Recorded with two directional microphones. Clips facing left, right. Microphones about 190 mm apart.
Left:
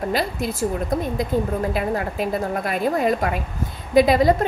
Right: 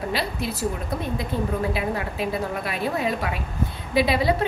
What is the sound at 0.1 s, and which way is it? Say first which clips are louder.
Speech: left 4 dB; 45° left (ahead or behind).